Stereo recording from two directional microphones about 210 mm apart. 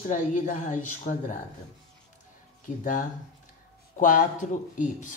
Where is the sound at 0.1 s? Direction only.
35° left (ahead or behind).